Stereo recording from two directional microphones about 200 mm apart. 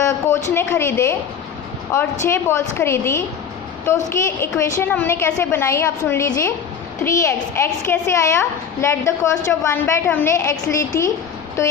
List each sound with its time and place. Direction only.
0.5 s a woman's voice: 10° left (ahead or behind)
2.2 s a woman's voice: 10° left (ahead or behind)